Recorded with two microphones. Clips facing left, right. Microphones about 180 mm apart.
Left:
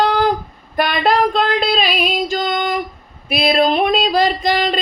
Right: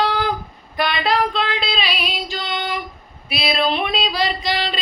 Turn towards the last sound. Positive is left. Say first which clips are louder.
# left 6 dB
turn(degrees=45)  # may be behind; listen again after turning